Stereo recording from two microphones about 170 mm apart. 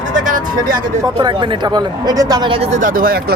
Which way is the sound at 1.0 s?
25° right (ahead or behind).